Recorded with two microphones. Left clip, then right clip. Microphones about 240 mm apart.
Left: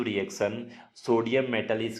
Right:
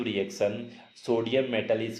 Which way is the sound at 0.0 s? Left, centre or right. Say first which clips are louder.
Even; left.